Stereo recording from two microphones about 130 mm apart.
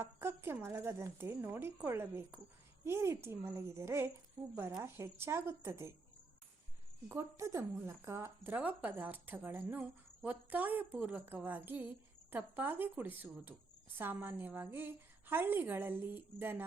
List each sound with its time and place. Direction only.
0.0 s a woman's voice: 20° right (ahead or behind)
4.4 s speech: 30° right (ahead or behind)
4.8 s a woman's voice: 20° right (ahead or behind)
7.1 s speech: 20° right (ahead or behind)